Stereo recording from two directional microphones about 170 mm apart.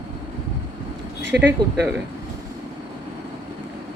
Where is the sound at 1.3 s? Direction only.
90° right.